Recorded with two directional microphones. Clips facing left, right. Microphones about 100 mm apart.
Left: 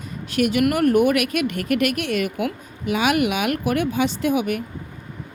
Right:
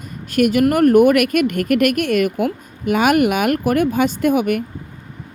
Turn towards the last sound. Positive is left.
turn(degrees=-50)  # may be behind; listen again after turning